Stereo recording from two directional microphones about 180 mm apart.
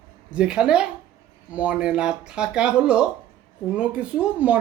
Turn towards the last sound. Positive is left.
turn(degrees=-5)  # may be behind; listen again after turning